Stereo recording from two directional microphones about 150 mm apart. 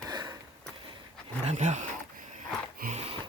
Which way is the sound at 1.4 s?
50° right (ahead or behind).